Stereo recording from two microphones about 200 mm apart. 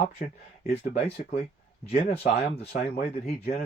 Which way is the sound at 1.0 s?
30° left (ahead or behind).